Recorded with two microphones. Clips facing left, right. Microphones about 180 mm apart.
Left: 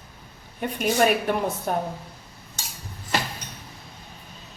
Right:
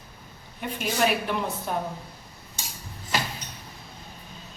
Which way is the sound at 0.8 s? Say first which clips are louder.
Left 4 dB; 50° left (ahead or behind).